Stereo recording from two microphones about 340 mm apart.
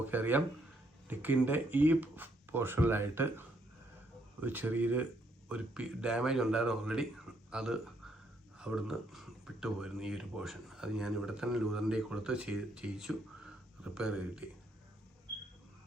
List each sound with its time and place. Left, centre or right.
0.0 s speech: centre